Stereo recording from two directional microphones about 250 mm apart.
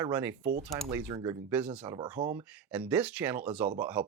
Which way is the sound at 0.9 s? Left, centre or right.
Centre.